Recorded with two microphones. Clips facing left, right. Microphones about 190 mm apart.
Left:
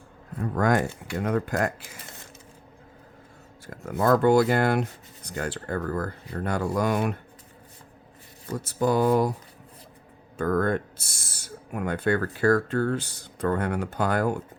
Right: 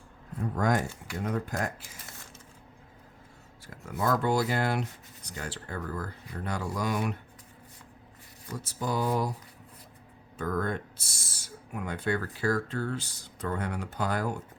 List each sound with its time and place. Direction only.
0.5 s speech: 70° left (ahead or behind)
3.7 s speech: 50° left (ahead or behind)
8.4 s speech: 55° left (ahead or behind)
10.3 s speech: 55° left (ahead or behind)